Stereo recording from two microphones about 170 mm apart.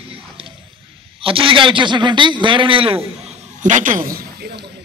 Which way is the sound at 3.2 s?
40° right (ahead or behind).